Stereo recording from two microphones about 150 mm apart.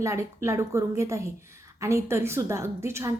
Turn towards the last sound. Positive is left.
turn(degrees=-20)  # may be behind; listen again after turning